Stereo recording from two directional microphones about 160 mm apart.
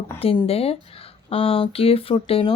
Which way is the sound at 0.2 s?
35° left (ahead or behind).